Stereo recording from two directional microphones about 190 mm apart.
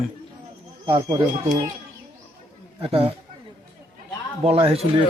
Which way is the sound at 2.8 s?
30° right (ahead or behind).